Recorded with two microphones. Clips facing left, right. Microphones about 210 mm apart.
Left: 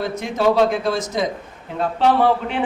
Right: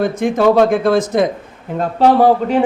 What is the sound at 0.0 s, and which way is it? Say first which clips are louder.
Speech: right 6 dB; 50° right (ahead or behind).